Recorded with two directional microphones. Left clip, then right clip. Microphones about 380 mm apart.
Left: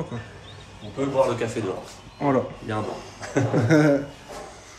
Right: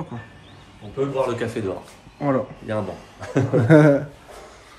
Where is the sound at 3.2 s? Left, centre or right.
Centre.